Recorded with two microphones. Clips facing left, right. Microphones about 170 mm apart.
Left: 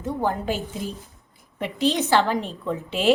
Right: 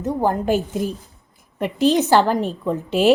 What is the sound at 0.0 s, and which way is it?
A woman's voice, 40° right (ahead or behind).